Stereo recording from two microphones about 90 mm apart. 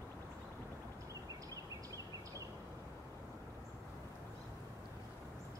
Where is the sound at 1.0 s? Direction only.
40° right (ahead or behind).